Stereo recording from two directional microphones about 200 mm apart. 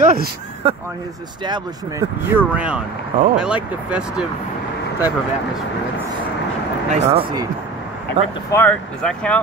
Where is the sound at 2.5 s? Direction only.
5° right (ahead or behind).